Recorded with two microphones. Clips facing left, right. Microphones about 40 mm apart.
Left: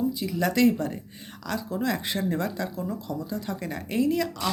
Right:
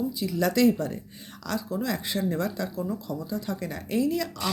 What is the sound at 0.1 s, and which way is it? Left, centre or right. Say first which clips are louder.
Speech: even; left.